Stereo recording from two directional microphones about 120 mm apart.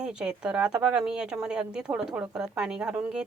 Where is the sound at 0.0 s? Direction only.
5° right (ahead or behind).